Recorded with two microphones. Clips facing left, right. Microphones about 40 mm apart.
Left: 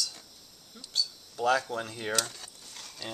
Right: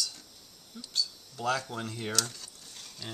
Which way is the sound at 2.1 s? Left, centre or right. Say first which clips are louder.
Left 3 dB; left.